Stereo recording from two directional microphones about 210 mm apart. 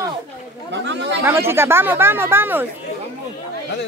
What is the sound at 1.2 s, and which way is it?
Speech, 10° right (ahead or behind).